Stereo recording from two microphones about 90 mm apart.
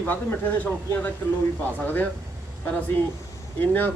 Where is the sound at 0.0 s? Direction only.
20° left (ahead or behind).